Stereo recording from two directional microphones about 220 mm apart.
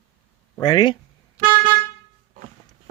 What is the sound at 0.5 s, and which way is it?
Speech, 20° left (ahead or behind).